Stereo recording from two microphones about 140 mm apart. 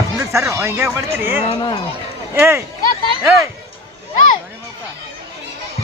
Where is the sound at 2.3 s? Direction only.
15° right (ahead or behind).